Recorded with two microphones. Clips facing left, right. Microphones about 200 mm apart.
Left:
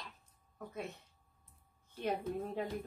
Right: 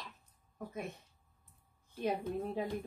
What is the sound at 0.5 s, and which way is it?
Speech, 15° right (ahead or behind).